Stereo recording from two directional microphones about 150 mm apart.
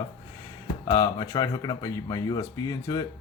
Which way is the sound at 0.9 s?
25° left (ahead or behind).